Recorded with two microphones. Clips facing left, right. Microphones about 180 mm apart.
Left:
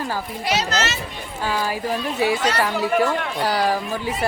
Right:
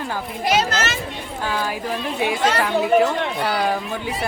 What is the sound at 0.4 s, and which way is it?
Speech, 50° right (ahead or behind).